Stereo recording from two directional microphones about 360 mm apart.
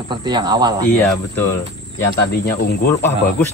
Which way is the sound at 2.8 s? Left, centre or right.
Centre.